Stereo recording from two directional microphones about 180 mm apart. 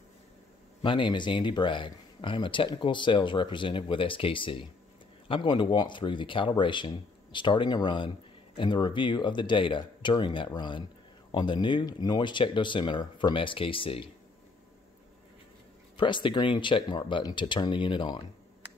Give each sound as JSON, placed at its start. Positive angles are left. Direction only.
{"t": 0.8, "sound": "speech", "side_deg": 25}
{"t": 16.0, "sound": "speech", "side_deg": 25}